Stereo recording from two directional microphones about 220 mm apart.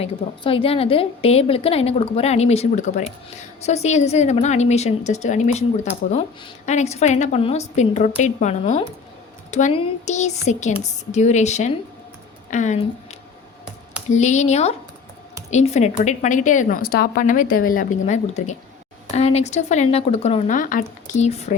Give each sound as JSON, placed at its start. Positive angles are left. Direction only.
{"t": 0.0, "sound": "a woman's voice", "side_deg": 25}